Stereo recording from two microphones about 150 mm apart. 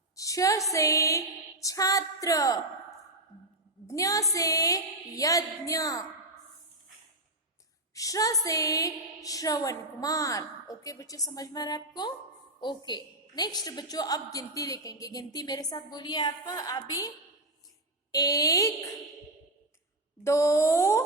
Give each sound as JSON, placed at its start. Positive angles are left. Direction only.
{"t": 0.2, "sound": "a woman's voice", "side_deg": 20}
{"t": 3.8, "sound": "a woman's voice", "side_deg": 20}
{"t": 7.9, "sound": "a woman's voice", "side_deg": 25}
{"t": 18.1, "sound": "a woman's voice", "side_deg": 25}
{"t": 20.2, "sound": "a woman's voice", "side_deg": 20}